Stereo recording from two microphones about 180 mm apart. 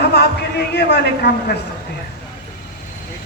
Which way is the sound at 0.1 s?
65° left (ahead or behind).